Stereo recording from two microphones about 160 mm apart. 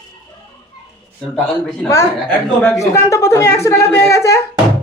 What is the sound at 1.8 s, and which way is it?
Speech, 15° left (ahead or behind).